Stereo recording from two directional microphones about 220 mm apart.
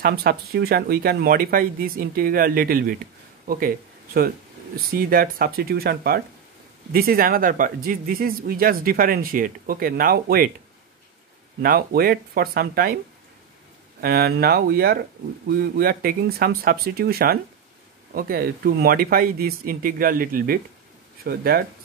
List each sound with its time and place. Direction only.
0.0 s speech: 45° right (ahead or behind)
11.6 s speech: 40° right (ahead or behind)
14.0 s speech: 45° right (ahead or behind)